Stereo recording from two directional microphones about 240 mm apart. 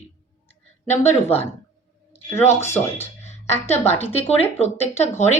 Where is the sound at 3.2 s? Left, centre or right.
Left.